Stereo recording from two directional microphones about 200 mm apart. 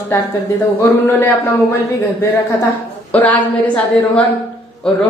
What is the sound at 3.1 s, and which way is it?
A woman's voice, 5° left (ahead or behind).